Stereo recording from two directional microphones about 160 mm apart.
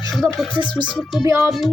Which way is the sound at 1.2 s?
20° right (ahead or behind).